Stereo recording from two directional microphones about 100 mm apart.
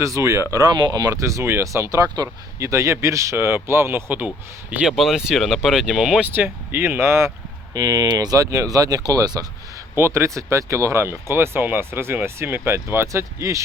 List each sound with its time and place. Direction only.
0.0 s speech: 30° right (ahead or behind)
4.9 s speech: 5° right (ahead or behind)
6.3 s speech: 20° right (ahead or behind); by 9.5 s 40° right (ahead or behind)
9.9 s speech: 25° right (ahead or behind)